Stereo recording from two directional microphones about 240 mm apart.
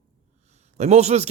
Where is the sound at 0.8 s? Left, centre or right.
Right.